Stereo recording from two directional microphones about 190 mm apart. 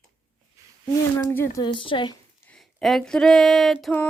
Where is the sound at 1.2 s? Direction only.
15° left (ahead or behind).